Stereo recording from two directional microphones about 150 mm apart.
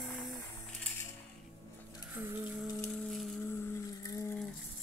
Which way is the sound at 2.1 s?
15° right (ahead or behind).